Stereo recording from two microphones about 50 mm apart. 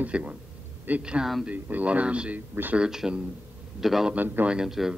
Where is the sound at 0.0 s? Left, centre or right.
Right.